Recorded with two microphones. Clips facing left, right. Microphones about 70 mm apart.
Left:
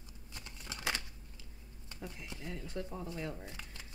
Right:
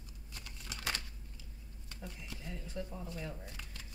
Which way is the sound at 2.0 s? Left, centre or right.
Left.